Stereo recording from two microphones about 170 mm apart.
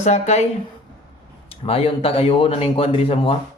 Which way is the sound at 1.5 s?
35° left (ahead or behind).